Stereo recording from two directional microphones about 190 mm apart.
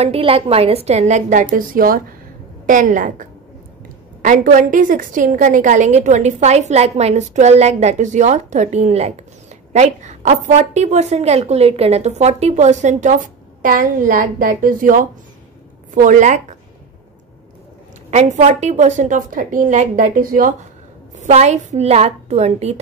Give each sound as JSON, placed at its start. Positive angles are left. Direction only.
{"t": 0.0, "sound": "a woman's voice", "side_deg": -30}
{"t": 18.1, "sound": "a woman's voice", "side_deg": -35}
{"t": 21.2, "sound": "a woman's voice", "side_deg": -35}